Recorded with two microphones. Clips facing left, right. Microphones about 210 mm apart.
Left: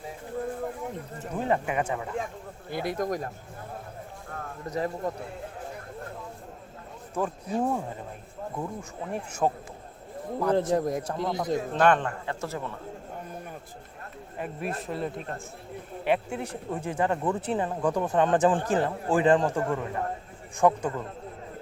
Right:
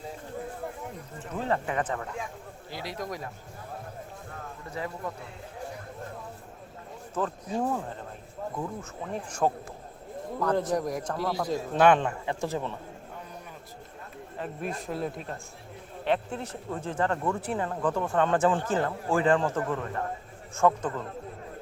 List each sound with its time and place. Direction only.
1.4 s speech: 15° left (ahead or behind)
2.6 s speech: 55° left (ahead or behind)
4.7 s speech: 40° left (ahead or behind)
7.1 s speech: 10° left (ahead or behind)
10.5 s a man's voice: 25° left (ahead or behind)
11.5 s speech: 5° right (ahead or behind)
14.3 s speech: 10° left (ahead or behind)
14.8 s speech: centre (ahead or behind)